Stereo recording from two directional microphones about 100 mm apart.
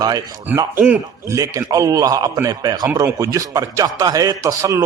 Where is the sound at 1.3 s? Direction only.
35° right (ahead or behind).